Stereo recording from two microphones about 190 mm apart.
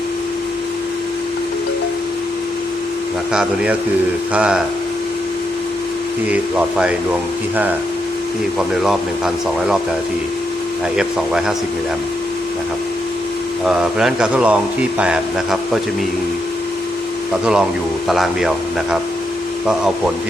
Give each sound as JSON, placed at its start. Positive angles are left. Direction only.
{"t": 3.3, "sound": "a man's voice", "side_deg": -5}
{"t": 6.3, "sound": "a man's voice", "side_deg": -5}
{"t": 8.5, "sound": "a man's voice", "side_deg": 0}
{"t": 10.9, "sound": "a man's voice", "side_deg": -5}
{"t": 13.7, "sound": "a man's voice", "side_deg": -5}
{"t": 17.4, "sound": "a man's voice", "side_deg": -5}